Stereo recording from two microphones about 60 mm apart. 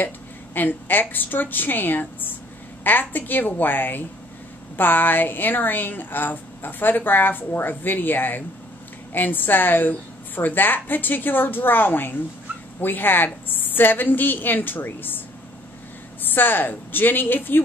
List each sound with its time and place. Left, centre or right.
0.6 s a woman's voice: left